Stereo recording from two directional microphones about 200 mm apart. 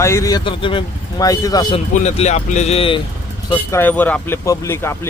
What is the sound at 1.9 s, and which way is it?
Speech, 35° left (ahead or behind).